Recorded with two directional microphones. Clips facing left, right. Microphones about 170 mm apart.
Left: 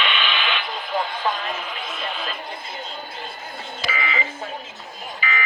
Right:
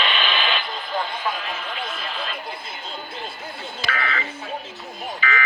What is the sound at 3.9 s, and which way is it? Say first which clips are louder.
Telephone: even; 10° left (ahead or behind).